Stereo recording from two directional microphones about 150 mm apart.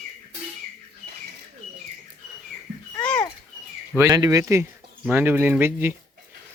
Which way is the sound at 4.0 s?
20° right (ahead or behind).